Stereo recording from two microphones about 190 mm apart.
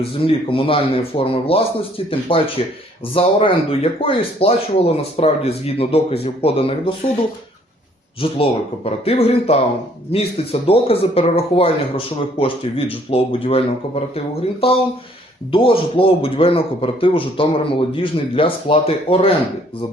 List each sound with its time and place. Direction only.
0.0 s a man's voice: 30° left (ahead or behind)
8.2 s a man's voice: 30° left (ahead or behind)